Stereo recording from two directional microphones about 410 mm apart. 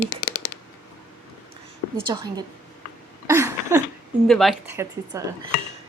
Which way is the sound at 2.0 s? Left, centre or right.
Centre.